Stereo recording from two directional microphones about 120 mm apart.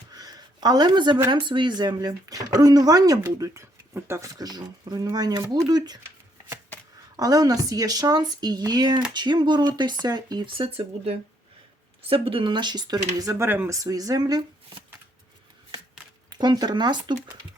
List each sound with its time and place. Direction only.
0.1 s a sound: 35° right (ahead or behind)
1.3 s speech: 40° right (ahead or behind); by 4.3 s 20° right (ahead or behind)
4.4 s speech: 35° right (ahead or behind)
7.2 s speech: 30° right (ahead or behind)
13.5 s speech: 15° right (ahead or behind)
13.7 s speech: 30° right (ahead or behind)
16.3 s speech: 35° right (ahead or behind)